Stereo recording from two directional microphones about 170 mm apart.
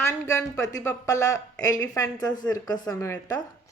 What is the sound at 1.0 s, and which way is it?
Speech, 20° left (ahead or behind).